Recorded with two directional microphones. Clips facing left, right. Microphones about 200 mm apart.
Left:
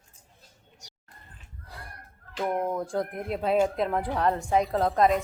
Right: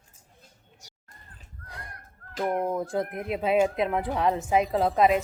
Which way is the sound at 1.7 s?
Centre (ahead or behind).